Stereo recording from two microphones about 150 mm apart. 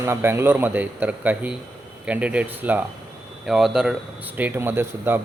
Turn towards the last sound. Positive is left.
turn(degrees=-15)  # may be behind; listen again after turning